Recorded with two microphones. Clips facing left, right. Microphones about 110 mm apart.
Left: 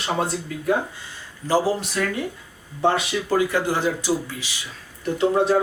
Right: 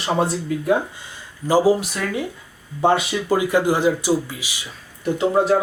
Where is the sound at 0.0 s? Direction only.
5° right (ahead or behind).